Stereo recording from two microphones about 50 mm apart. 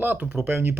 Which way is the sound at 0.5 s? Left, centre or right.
Right.